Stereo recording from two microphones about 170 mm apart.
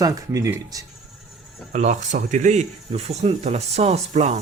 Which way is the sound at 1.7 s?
45° right (ahead or behind).